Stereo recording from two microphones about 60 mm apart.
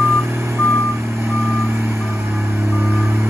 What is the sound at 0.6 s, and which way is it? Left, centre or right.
Reversing beeps, right.